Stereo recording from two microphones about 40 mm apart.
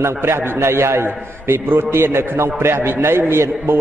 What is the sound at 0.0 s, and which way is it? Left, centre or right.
A man's voice, right.